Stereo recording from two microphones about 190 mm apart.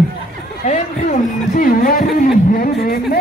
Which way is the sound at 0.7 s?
40° left (ahead or behind).